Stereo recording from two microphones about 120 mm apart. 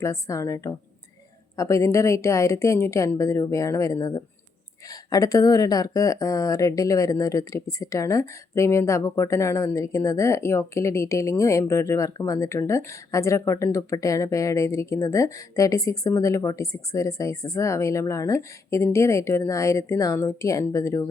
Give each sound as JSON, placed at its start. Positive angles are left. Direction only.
{"t": 0.0, "sound": "speech", "side_deg": 25}